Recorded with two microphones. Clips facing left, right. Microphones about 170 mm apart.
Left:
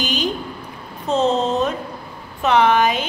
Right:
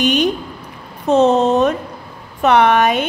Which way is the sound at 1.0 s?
65° right (ahead or behind).